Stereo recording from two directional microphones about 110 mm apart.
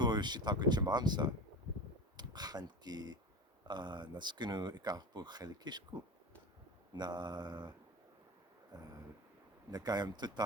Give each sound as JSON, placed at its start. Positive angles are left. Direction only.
{"t": 0.0, "sound": "speech", "side_deg": -40}